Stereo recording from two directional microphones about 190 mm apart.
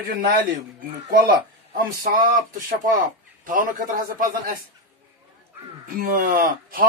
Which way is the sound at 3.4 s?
45° right (ahead or behind).